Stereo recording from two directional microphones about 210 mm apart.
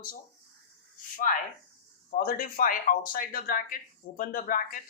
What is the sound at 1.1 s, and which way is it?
A man's voice, 40° left (ahead or behind).